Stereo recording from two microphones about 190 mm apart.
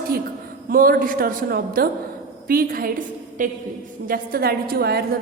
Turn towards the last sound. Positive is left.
turn(degrees=-55)  # may be behind; listen again after turning